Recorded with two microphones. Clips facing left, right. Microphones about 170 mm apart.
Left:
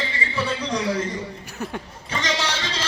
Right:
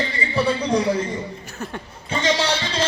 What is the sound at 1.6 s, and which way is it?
Speech, 15° left (ahead or behind).